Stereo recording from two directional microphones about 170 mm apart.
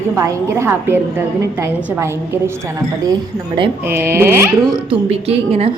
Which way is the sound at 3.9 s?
15° right (ahead or behind).